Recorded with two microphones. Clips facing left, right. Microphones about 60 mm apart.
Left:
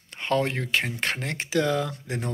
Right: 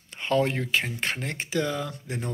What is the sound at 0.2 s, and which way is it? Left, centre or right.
Speech, left.